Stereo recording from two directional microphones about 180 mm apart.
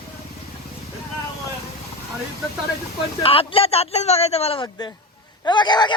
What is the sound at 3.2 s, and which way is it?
A man's voice, 30° left (ahead or behind).